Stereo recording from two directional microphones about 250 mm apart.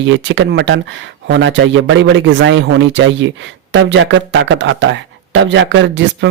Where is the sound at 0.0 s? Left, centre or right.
Right.